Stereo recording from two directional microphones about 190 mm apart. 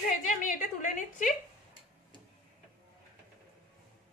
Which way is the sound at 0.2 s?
40° left (ahead or behind).